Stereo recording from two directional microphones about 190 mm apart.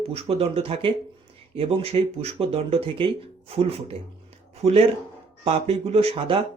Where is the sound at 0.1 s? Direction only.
30° right (ahead or behind).